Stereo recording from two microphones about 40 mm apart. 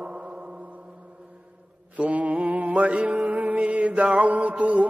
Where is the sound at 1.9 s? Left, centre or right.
Right.